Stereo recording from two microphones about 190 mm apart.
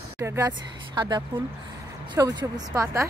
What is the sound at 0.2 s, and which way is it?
Speech, 15° right (ahead or behind).